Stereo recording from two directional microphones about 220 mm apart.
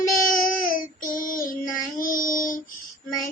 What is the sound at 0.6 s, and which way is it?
Child singing, 40° left (ahead or behind).